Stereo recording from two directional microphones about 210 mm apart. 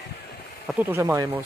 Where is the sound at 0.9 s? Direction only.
10° right (ahead or behind).